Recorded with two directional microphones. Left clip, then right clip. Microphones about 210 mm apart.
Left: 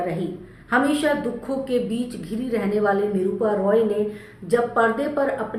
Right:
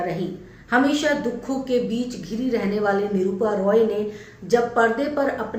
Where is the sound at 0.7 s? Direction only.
5° left (ahead or behind).